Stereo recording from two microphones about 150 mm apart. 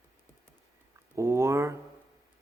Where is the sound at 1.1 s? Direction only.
20° right (ahead or behind).